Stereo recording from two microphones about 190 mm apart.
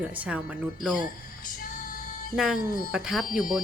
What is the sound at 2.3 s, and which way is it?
Speech, 5° right (ahead or behind).